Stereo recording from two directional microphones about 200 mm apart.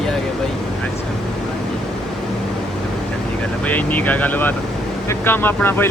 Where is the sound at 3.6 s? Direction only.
10° left (ahead or behind).